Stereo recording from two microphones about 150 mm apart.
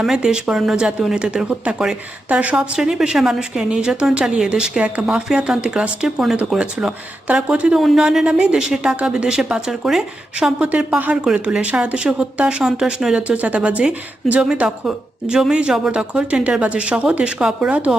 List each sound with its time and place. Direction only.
0.0 s a woman's voice: 5° right (ahead or behind)